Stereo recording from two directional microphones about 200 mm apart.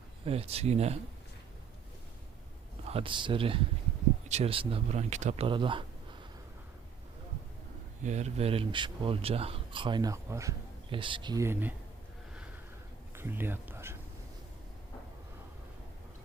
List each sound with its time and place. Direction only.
0.3 s speech: 30° right (ahead or behind)
2.8 s speech: 30° right (ahead or behind)
8.0 s speech: 35° right (ahead or behind); by 10.5 s 15° right (ahead or behind)
10.8 s speech: 25° right (ahead or behind)
13.1 s speech: 10° right (ahead or behind)